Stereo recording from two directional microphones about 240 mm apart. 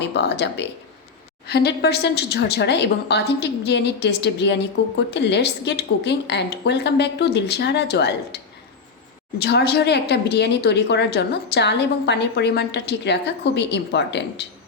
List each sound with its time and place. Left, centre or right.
0.0 s a woman's voice: left
9.4 s a woman's voice: left